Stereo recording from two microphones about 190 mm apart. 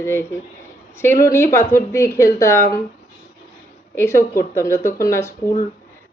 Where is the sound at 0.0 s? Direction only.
15° left (ahead or behind).